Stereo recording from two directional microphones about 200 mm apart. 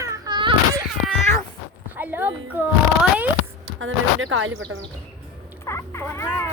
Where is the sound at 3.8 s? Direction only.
75° right (ahead or behind).